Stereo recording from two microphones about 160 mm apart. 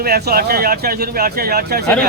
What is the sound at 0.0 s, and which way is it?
Speech, 75° right (ahead or behind).